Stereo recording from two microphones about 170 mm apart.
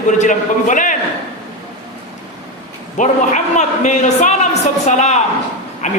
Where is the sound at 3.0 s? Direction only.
50° left (ahead or behind).